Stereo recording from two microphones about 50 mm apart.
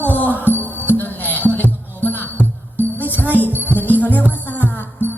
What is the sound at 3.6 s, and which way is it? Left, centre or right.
Music, right.